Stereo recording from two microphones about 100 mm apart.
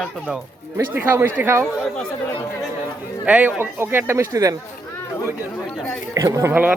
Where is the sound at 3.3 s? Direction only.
15° right (ahead or behind).